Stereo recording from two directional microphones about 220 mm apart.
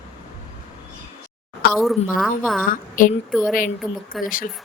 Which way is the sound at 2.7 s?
40° left (ahead or behind).